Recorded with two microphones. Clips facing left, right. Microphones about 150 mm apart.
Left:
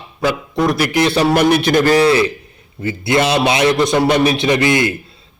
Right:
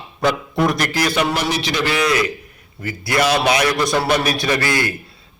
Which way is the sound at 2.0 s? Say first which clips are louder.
Left 6 dB; 30° left (ahead or behind).